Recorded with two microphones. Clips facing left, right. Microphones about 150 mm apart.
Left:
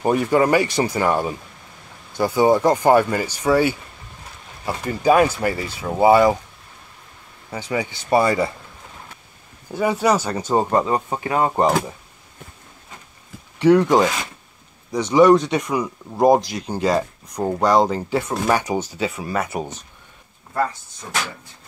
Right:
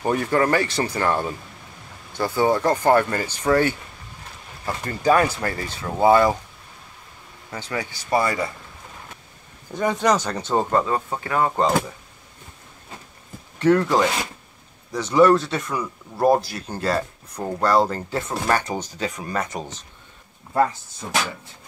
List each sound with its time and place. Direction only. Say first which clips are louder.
0.0 s speech: left 3 dB; 15° left (ahead or behind)
7.5 s speech: left 4 dB; 15° left (ahead or behind)
9.7 s speech: left 2 dB; 10° left (ahead or behind)
13.6 s speech: left 4 dB; 15° left (ahead or behind)